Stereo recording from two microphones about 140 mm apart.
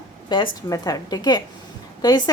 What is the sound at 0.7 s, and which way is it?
A woman's voice, 25° left (ahead or behind).